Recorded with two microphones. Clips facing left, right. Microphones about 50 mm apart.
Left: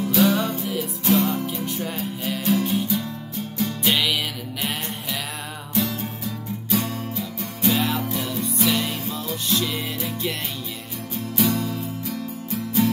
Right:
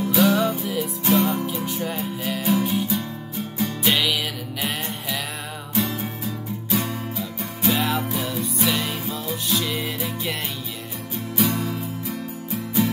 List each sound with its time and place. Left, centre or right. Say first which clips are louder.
0.0 s music: right 1 dB; centre
7.2 s music: even; centre
11.4 s music: left 1 dB; centre
12.4 s music: left 1 dB; centre